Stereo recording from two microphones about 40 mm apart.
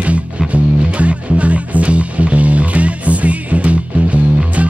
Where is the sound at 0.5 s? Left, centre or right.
Right.